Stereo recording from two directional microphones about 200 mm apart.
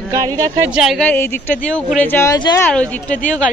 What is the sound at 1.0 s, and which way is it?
A woman's voice, 10° left (ahead or behind).